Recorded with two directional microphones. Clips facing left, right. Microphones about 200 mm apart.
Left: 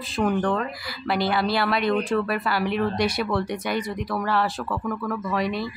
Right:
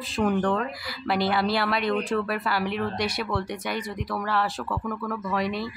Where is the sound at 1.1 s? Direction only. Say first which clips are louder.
Left 1 dB; 75° left (ahead or behind).